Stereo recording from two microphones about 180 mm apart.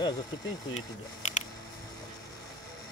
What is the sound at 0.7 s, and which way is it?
Speech, 40° left (ahead or behind).